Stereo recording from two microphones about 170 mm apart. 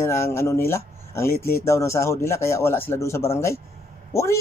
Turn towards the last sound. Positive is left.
turn(degrees=15)  # may be behind; listen again after turning